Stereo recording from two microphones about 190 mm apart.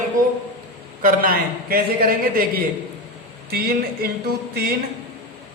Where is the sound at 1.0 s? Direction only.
50° right (ahead or behind).